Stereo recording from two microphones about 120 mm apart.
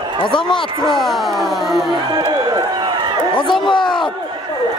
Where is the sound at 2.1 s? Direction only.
35° right (ahead or behind).